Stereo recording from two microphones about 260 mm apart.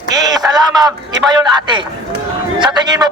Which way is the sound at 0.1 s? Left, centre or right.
Centre.